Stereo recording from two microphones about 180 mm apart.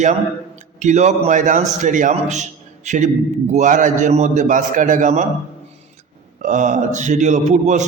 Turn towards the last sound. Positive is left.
turn(degrees=-40)  # may be behind; listen again after turning